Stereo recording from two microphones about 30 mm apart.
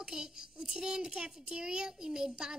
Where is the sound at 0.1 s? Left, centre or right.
Right.